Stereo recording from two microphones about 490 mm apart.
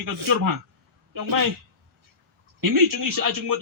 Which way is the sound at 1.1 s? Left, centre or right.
Right.